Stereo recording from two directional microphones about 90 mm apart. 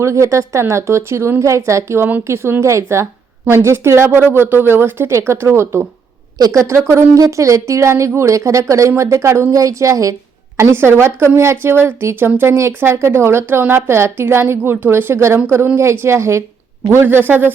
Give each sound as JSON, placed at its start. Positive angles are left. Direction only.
{"t": 0.0, "sound": "speech", "side_deg": -35}
{"t": 6.4, "sound": "speech", "side_deg": -40}